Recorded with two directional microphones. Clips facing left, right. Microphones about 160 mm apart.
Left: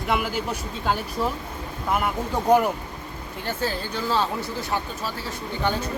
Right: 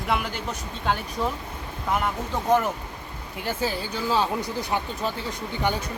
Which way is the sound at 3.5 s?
10° right (ahead or behind).